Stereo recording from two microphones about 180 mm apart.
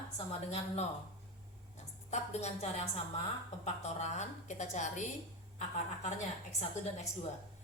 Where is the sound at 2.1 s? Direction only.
40° left (ahead or behind).